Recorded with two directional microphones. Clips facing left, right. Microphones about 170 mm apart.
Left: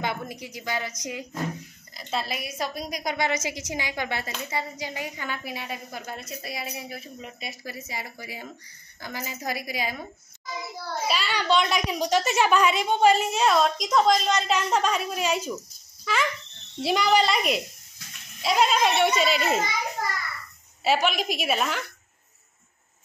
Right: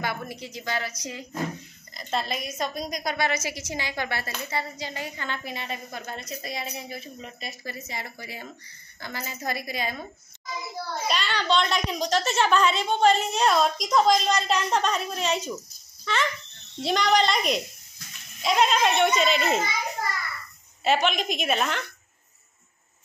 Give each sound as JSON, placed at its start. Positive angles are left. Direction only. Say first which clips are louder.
{"t": 0.0, "sound": "a woman's voice", "louder": "left 1 dB", "side_deg": 20}
{"t": 2.0, "sound": "a woman's voice", "louder": "right 1 dB", "side_deg": 5}
{"t": 11.1, "sound": "a woman's voice", "louder": "left 1 dB", "side_deg": 5}
{"t": 20.8, "sound": "a woman's voice", "louder": "even", "side_deg": 5}